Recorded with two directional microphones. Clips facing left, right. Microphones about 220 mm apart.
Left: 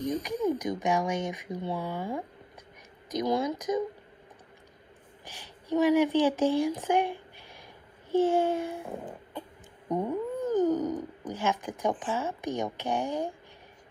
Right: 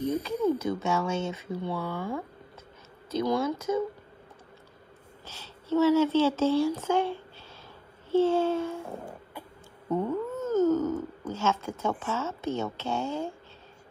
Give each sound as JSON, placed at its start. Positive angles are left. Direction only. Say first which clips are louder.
{"t": 0.2, "sound": "speech", "louder": "right 2 dB", "side_deg": 15}
{"t": 5.2, "sound": "speech", "louder": "even", "side_deg": 15}
{"t": 9.0, "sound": "a sound", "louder": "left 2 dB", "side_deg": -10}
{"t": 9.8, "sound": "speech", "louder": "right 1 dB", "side_deg": 15}